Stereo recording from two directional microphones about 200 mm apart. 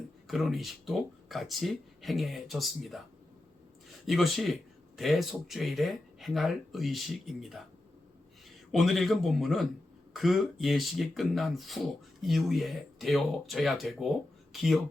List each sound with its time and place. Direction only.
0.3 s speech: centre (ahead or behind)
4.0 s speech: centre (ahead or behind)